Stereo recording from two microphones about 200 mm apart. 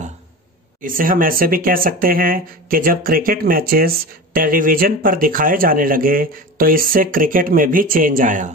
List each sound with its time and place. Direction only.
0.8 s speech: 45° right (ahead or behind)